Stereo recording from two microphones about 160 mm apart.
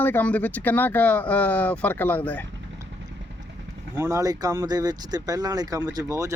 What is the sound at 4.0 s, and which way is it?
Speech, 20° right (ahead or behind).